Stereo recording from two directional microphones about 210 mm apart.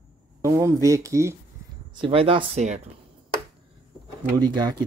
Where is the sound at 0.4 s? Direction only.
15° right (ahead or behind).